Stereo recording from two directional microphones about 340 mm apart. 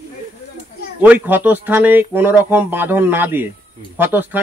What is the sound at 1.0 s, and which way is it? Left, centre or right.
Speech, centre.